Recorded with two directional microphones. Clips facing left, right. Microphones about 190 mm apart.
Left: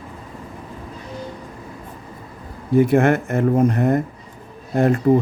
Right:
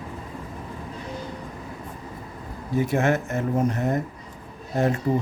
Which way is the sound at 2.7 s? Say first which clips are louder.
Left 7 dB; 60° left (ahead or behind).